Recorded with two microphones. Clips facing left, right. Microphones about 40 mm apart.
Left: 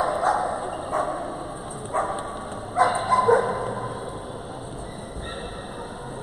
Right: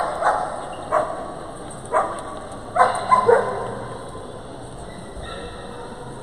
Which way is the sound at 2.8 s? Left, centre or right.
Right.